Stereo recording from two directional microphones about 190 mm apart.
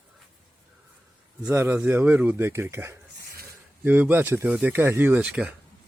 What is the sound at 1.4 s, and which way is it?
Speech, 15° right (ahead or behind).